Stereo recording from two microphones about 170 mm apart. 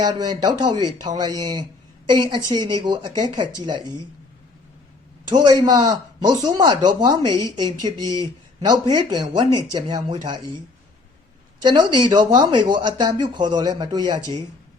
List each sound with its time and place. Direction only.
0.0 s speech: 25° right (ahead or behind)
5.3 s speech: 25° right (ahead or behind)
11.6 s speech: 25° right (ahead or behind)